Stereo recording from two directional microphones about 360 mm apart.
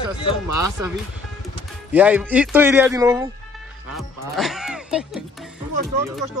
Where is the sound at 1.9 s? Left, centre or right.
Centre.